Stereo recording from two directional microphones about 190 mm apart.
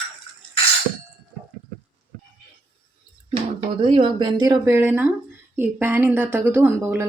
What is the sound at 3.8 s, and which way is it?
Speech, 30° right (ahead or behind).